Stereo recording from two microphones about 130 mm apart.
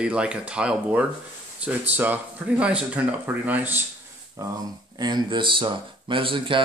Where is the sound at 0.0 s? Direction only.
5° right (ahead or behind).